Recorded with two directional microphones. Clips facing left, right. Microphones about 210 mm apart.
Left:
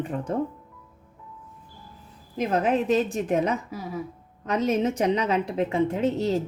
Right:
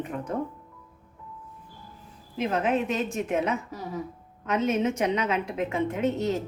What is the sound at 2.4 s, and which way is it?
A woman's voice, 40° left (ahead or behind).